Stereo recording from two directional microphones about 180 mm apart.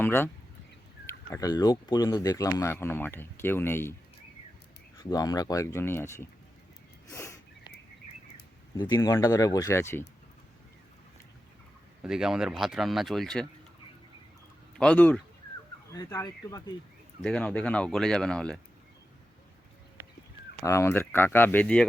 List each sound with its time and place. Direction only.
0.0 s speech: 10° left (ahead or behind)
5.0 s speech: 20° left (ahead or behind)
7.1 s a sound: 15° left (ahead or behind)
8.7 s speech: 20° left (ahead or behind)
12.0 s speech: 5° right (ahead or behind)
14.8 s speech: 5° left (ahead or behind)
15.9 s speech: 20° left (ahead or behind)
17.2 s speech: 5° left (ahead or behind)
20.7 s speech: 15° left (ahead or behind)